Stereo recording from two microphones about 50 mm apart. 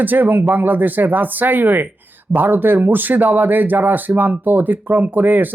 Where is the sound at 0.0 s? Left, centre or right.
Right.